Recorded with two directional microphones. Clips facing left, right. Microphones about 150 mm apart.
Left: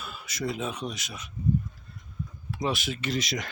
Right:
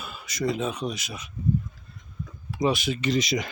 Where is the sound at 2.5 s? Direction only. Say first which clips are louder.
Right 5 dB; centre (ahead or behind).